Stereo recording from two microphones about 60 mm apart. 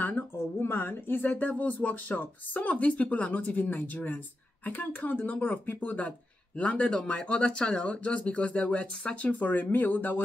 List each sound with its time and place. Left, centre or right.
0.6 s speech: left